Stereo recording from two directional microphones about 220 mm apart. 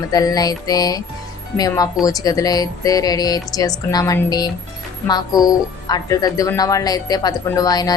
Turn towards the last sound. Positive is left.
turn(degrees=15)  # may be behind; listen again after turning